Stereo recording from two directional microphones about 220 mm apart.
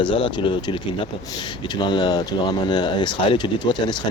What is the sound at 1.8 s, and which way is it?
Speech, 20° left (ahead or behind).